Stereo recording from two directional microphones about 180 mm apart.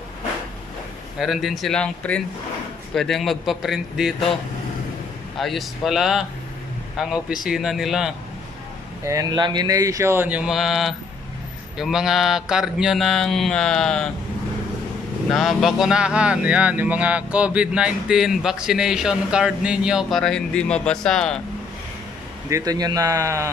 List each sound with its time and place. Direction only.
1.2 s speech: centre (ahead or behind)
5.4 s speech: centre (ahead or behind)
9.0 s speech: 20° right (ahead or behind); by 14.1 s centre (ahead or behind)
15.2 s speech: centre (ahead or behind)
22.5 s a man's voice: 20° right (ahead or behind)